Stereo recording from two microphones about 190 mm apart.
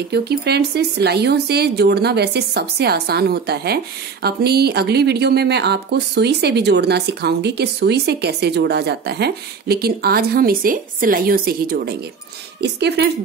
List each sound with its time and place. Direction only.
0.1 s speech: 60° right (ahead or behind)